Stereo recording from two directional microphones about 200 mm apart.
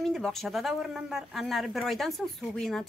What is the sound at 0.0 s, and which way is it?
Speech, centre (ahead or behind).